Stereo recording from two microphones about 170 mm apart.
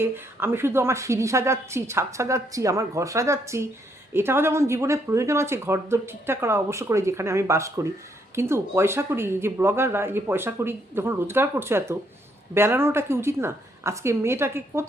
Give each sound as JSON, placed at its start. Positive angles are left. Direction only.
{"t": 0.0, "sound": "speech", "side_deg": -15}